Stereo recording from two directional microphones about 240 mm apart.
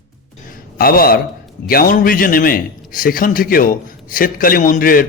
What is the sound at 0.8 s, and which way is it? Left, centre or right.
A man's voice, left.